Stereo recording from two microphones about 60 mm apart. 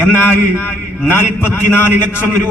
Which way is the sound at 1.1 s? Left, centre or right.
Left.